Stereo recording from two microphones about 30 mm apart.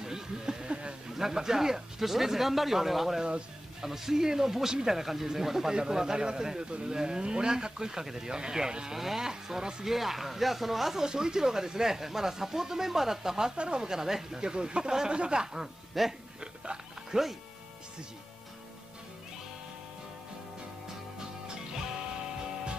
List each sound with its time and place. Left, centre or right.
0.0 s a sound: right
1.1 s speech: centre
5.7 s speech: right
8.9 s speech: centre
9.3 s speech: right
9.8 s speech: centre
11.0 s speech: right
14.5 s speech: right
16.0 s speech: centre
17.1 s speech: right